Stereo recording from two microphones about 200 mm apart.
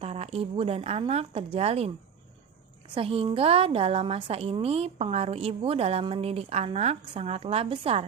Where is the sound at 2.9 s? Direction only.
30° right (ahead or behind).